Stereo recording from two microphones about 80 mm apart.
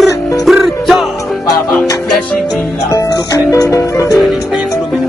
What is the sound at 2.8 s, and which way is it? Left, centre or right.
Music, left.